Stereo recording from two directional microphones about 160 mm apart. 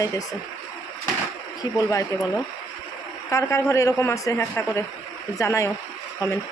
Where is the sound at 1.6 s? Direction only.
20° left (ahead or behind).